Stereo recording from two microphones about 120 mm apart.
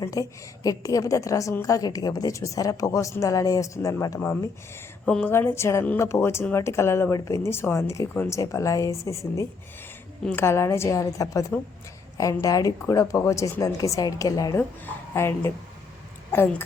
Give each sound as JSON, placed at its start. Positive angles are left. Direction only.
{"t": 0.0, "sound": "a woman's voice", "side_deg": 30}
{"t": 5.0, "sound": "a woman's voice", "side_deg": 10}
{"t": 5.3, "sound": "a woman's voice", "side_deg": 20}
{"t": 15.1, "sound": "a woman's voice", "side_deg": 20}